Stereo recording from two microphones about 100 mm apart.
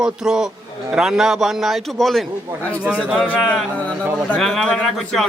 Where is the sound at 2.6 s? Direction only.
15° left (ahead or behind).